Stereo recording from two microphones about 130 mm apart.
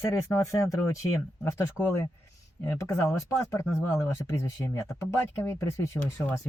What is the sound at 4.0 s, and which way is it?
Speech, 20° left (ahead or behind).